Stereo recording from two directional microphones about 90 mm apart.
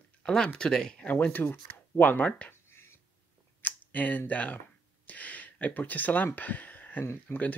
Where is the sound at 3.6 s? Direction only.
20° left (ahead or behind).